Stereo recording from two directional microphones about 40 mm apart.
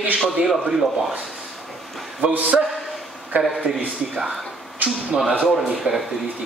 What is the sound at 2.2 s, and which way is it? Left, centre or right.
Speech, right.